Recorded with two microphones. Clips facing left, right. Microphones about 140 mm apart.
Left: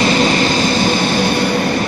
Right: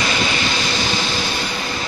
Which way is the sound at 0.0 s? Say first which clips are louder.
Left 8 dB; 40° left (ahead or behind).